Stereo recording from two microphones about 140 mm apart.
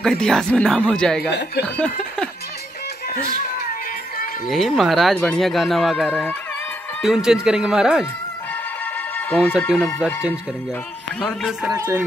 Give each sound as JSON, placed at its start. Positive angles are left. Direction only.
{"t": 0.0, "sound": "speech", "side_deg": 5}
{"t": 4.5, "sound": "speech", "side_deg": 0}
{"t": 9.3, "sound": "speech", "side_deg": 0}
{"t": 11.1, "sound": "speech", "side_deg": 5}
{"t": 11.7, "sound": "speech", "side_deg": -20}